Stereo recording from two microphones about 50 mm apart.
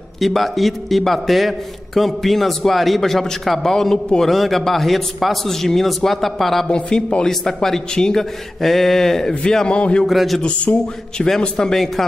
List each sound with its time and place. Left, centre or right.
0.2 s a man's voice: centre
6.7 s a man's voice: centre
7.2 s a man's voice: centre
10.0 s a man's voice: centre
10.4 s a man's voice: left
11.5 s a man's voice: centre